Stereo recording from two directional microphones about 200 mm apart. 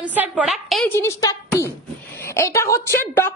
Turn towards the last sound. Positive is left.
turn(degrees=15)  # may be behind; listen again after turning